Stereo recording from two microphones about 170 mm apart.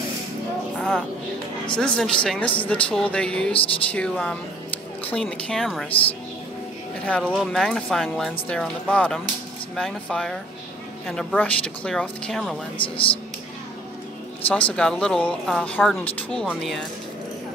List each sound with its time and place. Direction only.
0.7 s a sound: 5° left (ahead or behind)
1.7 s speech: 5° left (ahead or behind)
7.1 s speech: 5° left (ahead or behind)
12.8 s speech: 30° left (ahead or behind)
14.8 s speech: 5° left (ahead or behind)